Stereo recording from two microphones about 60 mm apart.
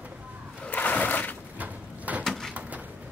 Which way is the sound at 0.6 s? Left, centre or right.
Left.